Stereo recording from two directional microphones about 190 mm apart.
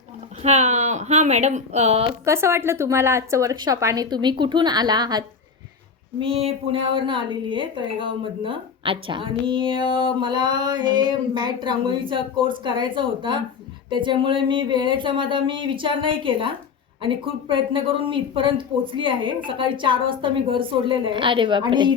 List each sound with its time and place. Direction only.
0.4 s speech: 35° right (ahead or behind)
2.2 s a woman's voice: 15° right (ahead or behind)